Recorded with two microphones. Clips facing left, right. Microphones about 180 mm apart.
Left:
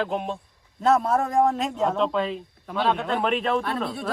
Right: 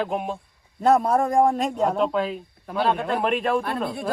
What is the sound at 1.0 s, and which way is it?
Speech, 45° right (ahead or behind).